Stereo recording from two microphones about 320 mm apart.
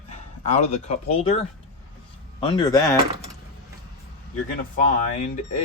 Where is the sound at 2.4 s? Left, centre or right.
Centre.